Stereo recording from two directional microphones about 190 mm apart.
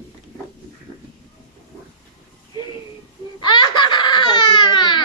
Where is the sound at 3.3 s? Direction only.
25° left (ahead or behind).